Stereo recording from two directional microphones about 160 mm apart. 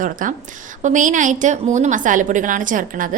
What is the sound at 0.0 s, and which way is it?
A woman's voice, 55° right (ahead or behind).